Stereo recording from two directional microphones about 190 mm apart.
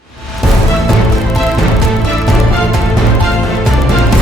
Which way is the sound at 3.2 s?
Centre (ahead or behind).